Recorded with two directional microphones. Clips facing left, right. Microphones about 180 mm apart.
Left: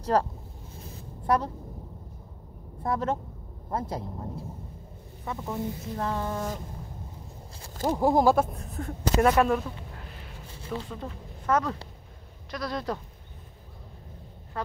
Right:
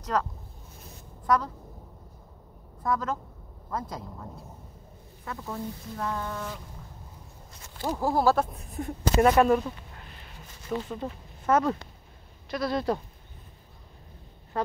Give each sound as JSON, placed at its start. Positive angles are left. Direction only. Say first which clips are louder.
{"t": 0.0, "sound": "speech", "louder": "left 4 dB", "side_deg": 30}
{"t": 0.8, "sound": "a sound", "louder": "even", "side_deg": 30}
{"t": 2.8, "sound": "speech", "louder": "left 1 dB", "side_deg": 30}
{"t": 5.2, "sound": "speech", "louder": "left 3 dB", "side_deg": 15}
{"t": 5.9, "sound": "a sound", "louder": "left 2 dB", "side_deg": 30}
{"t": 7.8, "sound": "speech", "louder": "left 3 dB", "side_deg": 20}
{"t": 8.8, "sound": "speech", "louder": "right 2 dB", "side_deg": -20}
{"t": 9.2, "sound": "speech", "louder": "right 2 dB", "side_deg": 0}
{"t": 10.4, "sound": "a sound", "louder": "left 5 dB", "side_deg": 30}
{"t": 10.8, "sound": "speech", "louder": "right 3 dB", "side_deg": -5}
{"t": 11.5, "sound": "speech", "louder": "right 2 dB", "side_deg": -25}
{"t": 12.4, "sound": "speech", "louder": "right 4 dB", "side_deg": -5}